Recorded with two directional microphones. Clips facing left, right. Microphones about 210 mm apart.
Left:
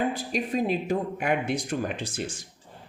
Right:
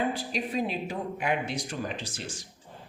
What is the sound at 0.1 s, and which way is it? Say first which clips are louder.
Speech: left 3 dB; 45° left (ahead or behind).